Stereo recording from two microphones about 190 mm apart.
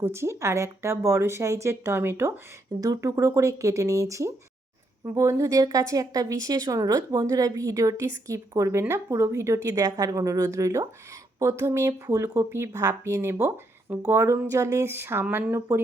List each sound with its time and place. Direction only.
0.0 s speech: 15° right (ahead or behind)